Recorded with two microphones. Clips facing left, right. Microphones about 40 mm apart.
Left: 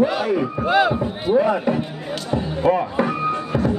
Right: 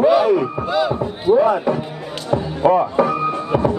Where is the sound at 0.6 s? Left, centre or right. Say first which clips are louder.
Left 2 dB; left.